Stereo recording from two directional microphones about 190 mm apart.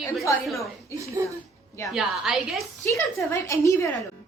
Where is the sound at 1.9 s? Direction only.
Centre (ahead or behind).